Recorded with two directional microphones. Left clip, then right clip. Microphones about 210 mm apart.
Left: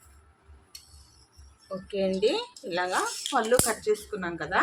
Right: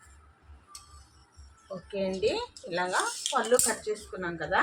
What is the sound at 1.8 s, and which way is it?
A woman's voice, 45° left (ahead or behind).